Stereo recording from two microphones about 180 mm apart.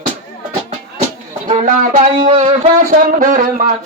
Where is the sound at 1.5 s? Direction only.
40° right (ahead or behind).